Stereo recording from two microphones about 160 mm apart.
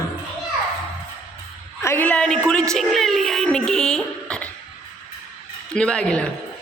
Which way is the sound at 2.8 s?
Centre (ahead or behind).